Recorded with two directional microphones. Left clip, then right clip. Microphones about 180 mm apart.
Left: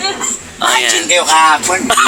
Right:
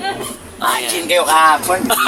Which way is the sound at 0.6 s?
5° left (ahead or behind).